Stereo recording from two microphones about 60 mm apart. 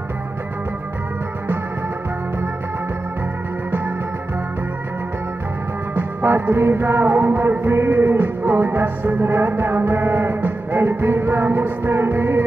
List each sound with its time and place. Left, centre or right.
5.9 s music: right
9.2 s music: right